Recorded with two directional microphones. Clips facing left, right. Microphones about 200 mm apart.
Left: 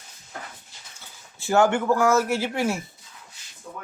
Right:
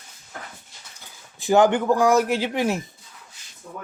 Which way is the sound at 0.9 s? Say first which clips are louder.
Right 1 dB; 15° right (ahead or behind).